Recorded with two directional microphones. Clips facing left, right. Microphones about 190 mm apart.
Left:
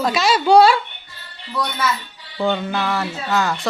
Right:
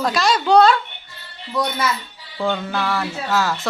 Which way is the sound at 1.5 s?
10° right (ahead or behind).